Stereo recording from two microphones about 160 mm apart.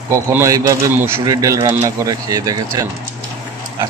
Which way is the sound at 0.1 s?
20° right (ahead or behind).